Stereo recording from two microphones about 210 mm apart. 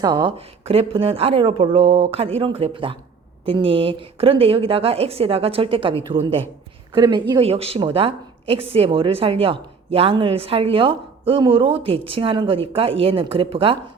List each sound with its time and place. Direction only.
0.0 s a woman's voice: 20° right (ahead or behind)